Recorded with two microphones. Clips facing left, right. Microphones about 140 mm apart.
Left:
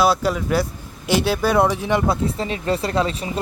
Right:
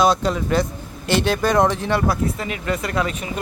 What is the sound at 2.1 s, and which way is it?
Speech, 30° left (ahead or behind).